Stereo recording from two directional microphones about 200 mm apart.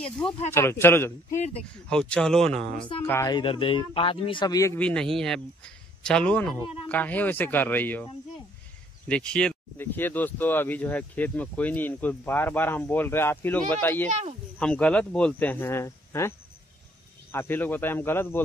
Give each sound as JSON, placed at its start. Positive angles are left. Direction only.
{"t": 0.0, "sound": "speech", "side_deg": 10}
{"t": 1.3, "sound": "speech", "side_deg": 35}
{"t": 1.9, "sound": "speech", "side_deg": 5}
{"t": 3.1, "sound": "speech", "side_deg": 15}